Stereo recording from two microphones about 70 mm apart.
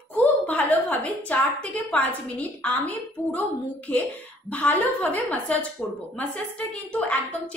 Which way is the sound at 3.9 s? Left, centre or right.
Centre.